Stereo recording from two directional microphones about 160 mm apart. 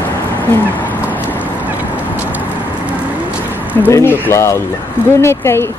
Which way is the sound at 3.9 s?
15° left (ahead or behind).